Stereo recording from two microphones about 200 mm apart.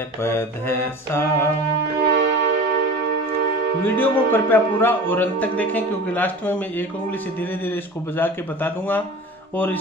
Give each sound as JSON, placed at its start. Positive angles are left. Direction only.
{"t": 0.2, "sound": "a man's voice", "side_deg": 10}
{"t": 2.0, "sound": "music", "side_deg": -65}
{"t": 3.8, "sound": "a man's voice", "side_deg": 10}